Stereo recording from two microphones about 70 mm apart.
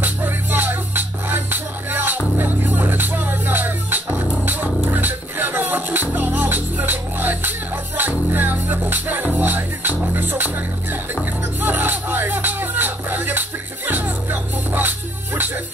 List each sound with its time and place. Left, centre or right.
0.0 s music: right